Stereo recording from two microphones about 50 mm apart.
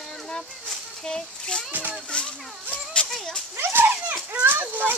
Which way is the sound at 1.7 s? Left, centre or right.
Right.